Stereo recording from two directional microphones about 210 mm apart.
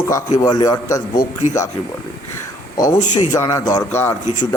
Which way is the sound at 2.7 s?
15° left (ahead or behind).